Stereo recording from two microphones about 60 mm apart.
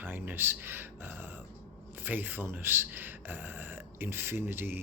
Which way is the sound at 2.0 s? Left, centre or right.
Right.